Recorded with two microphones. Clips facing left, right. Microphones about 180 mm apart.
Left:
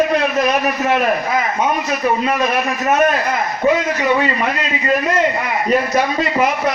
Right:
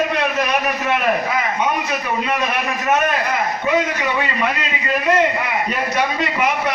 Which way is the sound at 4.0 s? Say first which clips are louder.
Left 4 dB; 40° left (ahead or behind).